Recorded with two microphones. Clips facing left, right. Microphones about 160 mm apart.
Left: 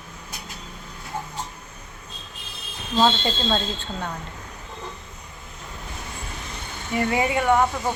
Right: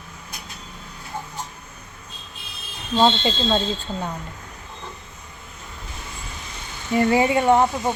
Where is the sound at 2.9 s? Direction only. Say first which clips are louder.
Right 2 dB; 15° right (ahead or behind).